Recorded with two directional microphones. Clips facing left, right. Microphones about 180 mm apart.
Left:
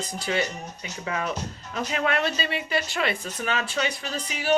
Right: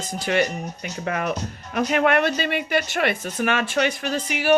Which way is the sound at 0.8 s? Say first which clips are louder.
Right 3 dB; 55° right (ahead or behind).